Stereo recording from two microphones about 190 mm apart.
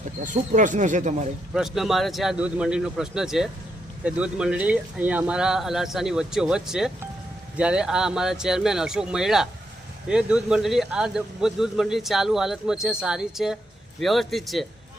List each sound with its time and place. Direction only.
0.2 s speech: 40° right (ahead or behind)
1.5 s speech: centre (ahead or behind)